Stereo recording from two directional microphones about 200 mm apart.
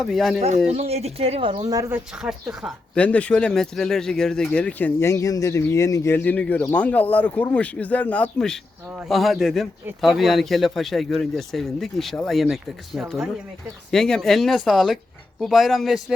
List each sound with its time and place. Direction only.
0.0 s speech: centre (ahead or behind)
0.7 s speech: 30° right (ahead or behind); by 2.0 s 15° right (ahead or behind)
2.2 s speech: 5° right (ahead or behind)